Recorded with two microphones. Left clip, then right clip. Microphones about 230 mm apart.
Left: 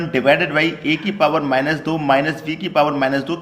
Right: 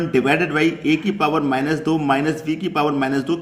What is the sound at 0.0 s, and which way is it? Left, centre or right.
A man's voice, centre.